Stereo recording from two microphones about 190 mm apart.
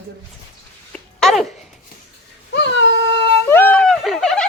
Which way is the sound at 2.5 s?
65° left (ahead or behind).